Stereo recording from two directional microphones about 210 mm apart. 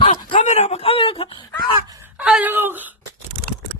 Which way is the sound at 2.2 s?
5° right (ahead or behind).